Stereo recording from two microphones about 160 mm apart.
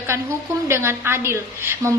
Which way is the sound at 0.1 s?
15° right (ahead or behind).